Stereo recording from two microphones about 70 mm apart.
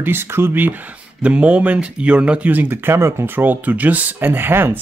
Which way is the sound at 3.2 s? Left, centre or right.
Right.